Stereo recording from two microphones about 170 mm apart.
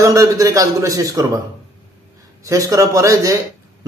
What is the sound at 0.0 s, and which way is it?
A man's voice, 20° right (ahead or behind).